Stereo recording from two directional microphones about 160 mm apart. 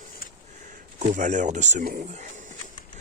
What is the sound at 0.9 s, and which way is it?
Speech, 50° right (ahead or behind).